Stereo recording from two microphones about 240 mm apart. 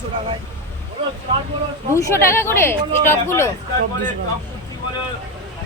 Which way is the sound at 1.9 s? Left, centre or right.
Centre.